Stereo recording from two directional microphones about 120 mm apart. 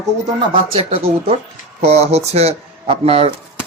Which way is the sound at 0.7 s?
55° right (ahead or behind).